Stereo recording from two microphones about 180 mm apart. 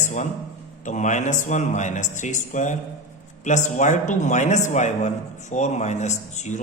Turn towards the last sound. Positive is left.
turn(degrees=40)  # may be behind; listen again after turning